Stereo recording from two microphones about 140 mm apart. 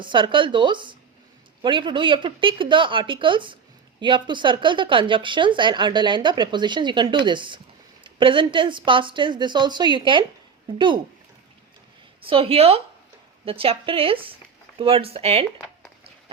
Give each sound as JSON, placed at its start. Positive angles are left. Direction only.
{"t": 0.0, "sound": "speech", "side_deg": -35}
{"t": 12.2, "sound": "speech", "side_deg": -40}